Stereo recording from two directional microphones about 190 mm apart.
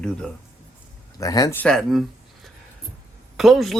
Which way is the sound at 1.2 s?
20° left (ahead or behind).